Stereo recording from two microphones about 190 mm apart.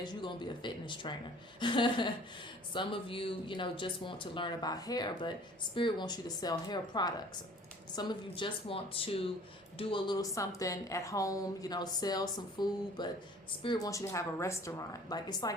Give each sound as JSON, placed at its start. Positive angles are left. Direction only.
{"t": 0.0, "sound": "a woman's voice", "side_deg": 25}